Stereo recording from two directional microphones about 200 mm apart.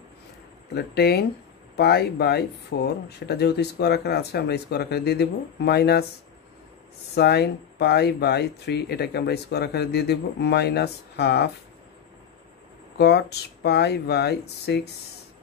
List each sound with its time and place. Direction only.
0.7 s speech: 55° left (ahead or behind)
7.2 s speech: 55° left (ahead or behind)
12.9 s speech: 55° left (ahead or behind)